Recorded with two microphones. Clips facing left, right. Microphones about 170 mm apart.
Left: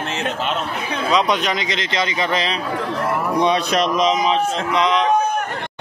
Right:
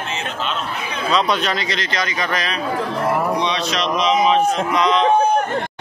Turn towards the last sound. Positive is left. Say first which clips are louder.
# right 1 dB
turn(degrees=20)  # may be behind; listen again after turning